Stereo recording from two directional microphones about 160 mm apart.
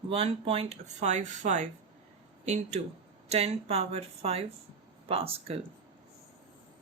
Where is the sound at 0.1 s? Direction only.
40° right (ahead or behind).